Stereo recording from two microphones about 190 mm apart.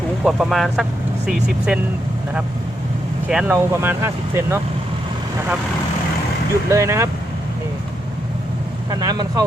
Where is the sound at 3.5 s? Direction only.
15° right (ahead or behind).